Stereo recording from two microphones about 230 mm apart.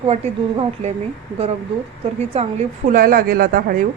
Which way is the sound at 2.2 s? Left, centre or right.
Right.